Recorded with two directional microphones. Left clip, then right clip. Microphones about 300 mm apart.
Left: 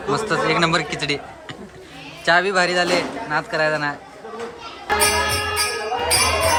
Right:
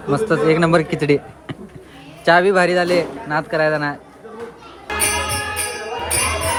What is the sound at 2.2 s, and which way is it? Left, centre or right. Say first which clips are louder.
A man's voice: right 4 dB; centre.